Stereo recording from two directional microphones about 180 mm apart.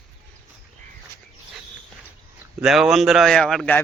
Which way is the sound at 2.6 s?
Centre (ahead or behind).